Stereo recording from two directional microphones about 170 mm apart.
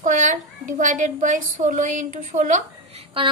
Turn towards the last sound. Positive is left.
turn(degrees=-45)  # may be behind; listen again after turning